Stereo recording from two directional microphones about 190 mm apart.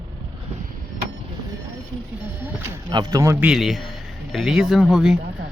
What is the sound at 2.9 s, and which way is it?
Speech, 20° right (ahead or behind).